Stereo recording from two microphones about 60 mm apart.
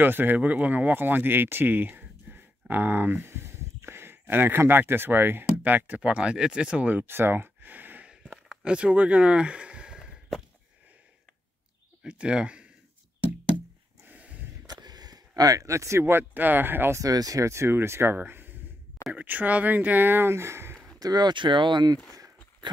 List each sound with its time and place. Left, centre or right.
0.0 s speech: right
8.6 s speech: centre
12.0 s speech: centre
14.0 s a sound: right
14.9 s speech: right
17.0 s speech: right
17.5 s speech: right
21.0 s speech: right
21.4 s speech: right